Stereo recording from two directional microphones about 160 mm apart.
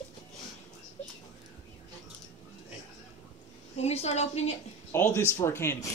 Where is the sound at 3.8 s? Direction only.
40° left (ahead or behind).